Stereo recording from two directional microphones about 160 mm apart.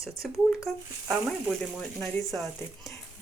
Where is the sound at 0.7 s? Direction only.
5° left (ahead or behind).